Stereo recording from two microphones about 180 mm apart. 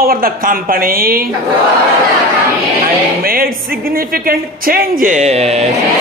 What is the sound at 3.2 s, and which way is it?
A woman's voice, 55° right (ahead or behind).